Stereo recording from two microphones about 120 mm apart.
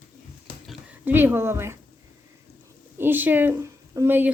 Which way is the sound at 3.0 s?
15° right (ahead or behind).